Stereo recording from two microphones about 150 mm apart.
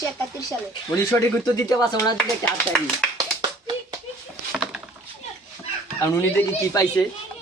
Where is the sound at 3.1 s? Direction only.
30° right (ahead or behind).